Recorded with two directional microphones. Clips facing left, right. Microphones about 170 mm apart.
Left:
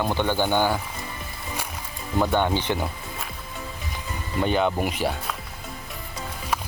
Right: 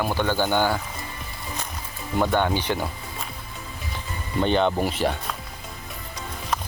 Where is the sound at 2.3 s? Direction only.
15° left (ahead or behind).